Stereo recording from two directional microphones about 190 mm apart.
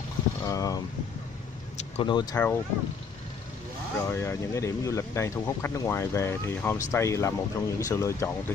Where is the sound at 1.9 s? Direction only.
25° left (ahead or behind).